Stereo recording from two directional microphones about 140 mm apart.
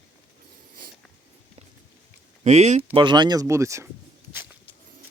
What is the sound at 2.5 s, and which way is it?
Speech, 55° right (ahead or behind).